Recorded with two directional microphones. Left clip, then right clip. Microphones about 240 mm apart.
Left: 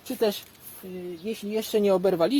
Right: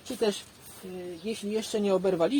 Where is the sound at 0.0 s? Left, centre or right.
Left.